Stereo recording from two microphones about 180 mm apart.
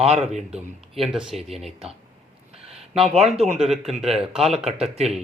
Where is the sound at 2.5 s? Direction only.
35° right (ahead or behind).